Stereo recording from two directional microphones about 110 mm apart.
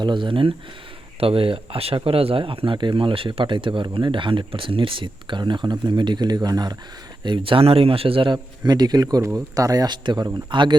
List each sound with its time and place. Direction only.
0.0 s speech: 45° right (ahead or behind)
7.3 s speech: 50° right (ahead or behind)